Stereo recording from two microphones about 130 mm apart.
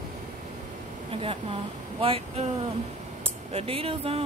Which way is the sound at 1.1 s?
45° right (ahead or behind).